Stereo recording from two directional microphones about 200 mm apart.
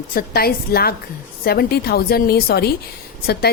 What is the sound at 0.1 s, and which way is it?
A woman's voice, 50° left (ahead or behind).